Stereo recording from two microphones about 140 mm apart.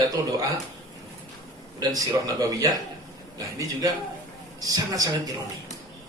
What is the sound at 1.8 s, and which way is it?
Speech, 25° right (ahead or behind).